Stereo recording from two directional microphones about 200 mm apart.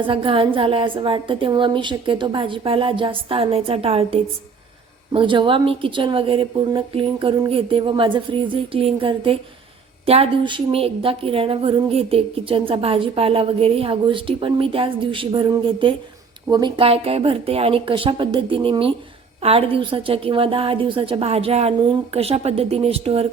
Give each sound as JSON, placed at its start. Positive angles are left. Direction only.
{"t": 0.0, "sound": "a woman's voice", "side_deg": -25}